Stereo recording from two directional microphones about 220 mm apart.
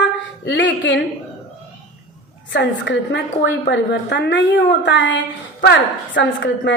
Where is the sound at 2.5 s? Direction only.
55° left (ahead or behind).